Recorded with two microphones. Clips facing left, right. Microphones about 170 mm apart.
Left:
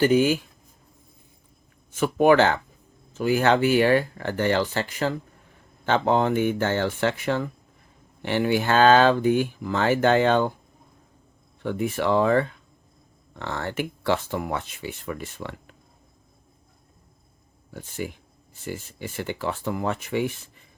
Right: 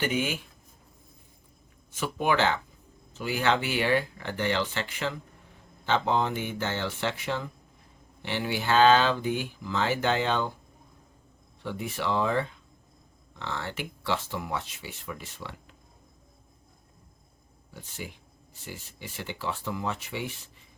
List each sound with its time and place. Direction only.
0.0 s speech: 40° left (ahead or behind)
1.9 s speech: 50° left (ahead or behind)
5.8 s speech: 50° left (ahead or behind)
11.6 s speech: 50° left (ahead or behind)
17.7 s speech: 50° left (ahead or behind)